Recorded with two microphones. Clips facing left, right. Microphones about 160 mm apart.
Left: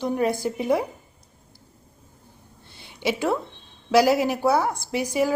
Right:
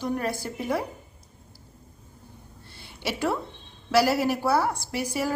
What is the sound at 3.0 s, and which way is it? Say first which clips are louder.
A woman's voice: left 4 dB; 15° left (ahead or behind).